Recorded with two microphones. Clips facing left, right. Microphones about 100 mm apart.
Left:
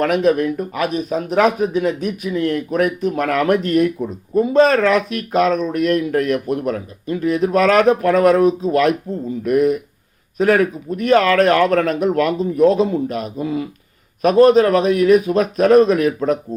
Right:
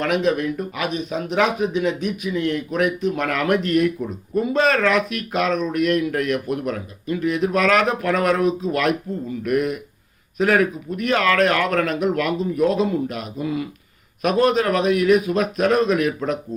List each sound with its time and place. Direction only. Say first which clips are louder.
0.0 s speech: left 5 dB; 40° left (ahead or behind)